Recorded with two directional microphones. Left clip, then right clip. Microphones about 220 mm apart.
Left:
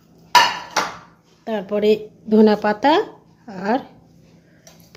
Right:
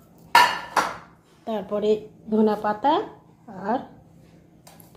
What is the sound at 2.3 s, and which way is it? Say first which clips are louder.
A woman's voice: left 7 dB; 50° left (ahead or behind).